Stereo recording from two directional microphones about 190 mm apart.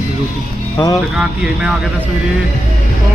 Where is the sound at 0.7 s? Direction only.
20° left (ahead or behind).